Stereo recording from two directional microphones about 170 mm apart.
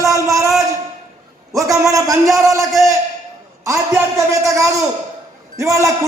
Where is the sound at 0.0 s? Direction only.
20° right (ahead or behind).